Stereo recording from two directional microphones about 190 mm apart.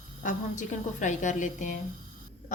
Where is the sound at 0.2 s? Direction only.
40° left (ahead or behind).